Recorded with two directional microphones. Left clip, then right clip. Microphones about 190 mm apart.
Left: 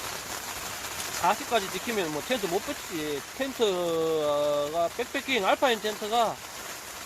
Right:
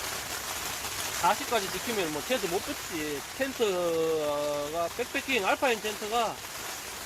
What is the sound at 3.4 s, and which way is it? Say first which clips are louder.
Speech: left 1 dB; 35° left (ahead or behind).